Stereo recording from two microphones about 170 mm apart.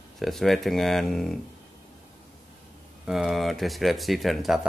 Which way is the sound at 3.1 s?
Centre (ahead or behind).